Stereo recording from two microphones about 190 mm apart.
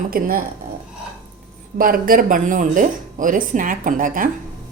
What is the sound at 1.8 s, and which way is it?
A woman's voice, 50° right (ahead or behind).